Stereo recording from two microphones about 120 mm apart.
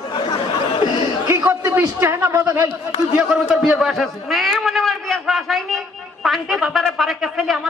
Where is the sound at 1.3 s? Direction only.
25° right (ahead or behind).